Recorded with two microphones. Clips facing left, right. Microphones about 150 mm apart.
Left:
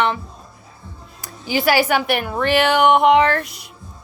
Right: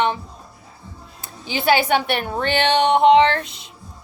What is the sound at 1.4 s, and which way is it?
A woman's voice, 25° right (ahead or behind).